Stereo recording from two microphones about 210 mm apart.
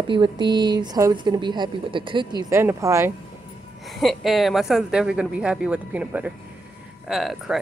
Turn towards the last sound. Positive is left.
turn(degrees=0)  # may be behind; listen again after turning